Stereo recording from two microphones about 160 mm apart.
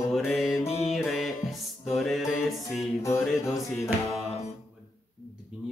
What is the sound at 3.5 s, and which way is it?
Speech, centre (ahead or behind).